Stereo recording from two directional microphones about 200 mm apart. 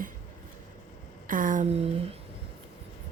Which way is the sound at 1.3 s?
40° right (ahead or behind).